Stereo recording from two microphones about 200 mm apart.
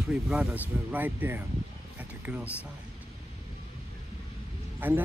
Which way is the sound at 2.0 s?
5° right (ahead or behind).